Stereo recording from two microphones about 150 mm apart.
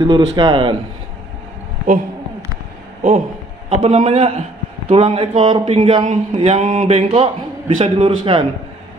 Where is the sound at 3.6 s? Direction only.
45° right (ahead or behind).